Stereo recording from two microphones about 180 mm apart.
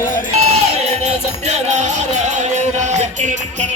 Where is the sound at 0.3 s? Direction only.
35° right (ahead or behind).